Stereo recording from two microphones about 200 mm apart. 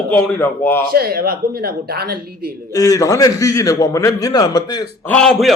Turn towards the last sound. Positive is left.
turn(degrees=0)  # may be behind; listen again after turning